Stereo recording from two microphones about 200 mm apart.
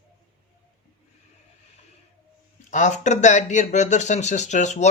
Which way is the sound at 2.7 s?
35° left (ahead or behind).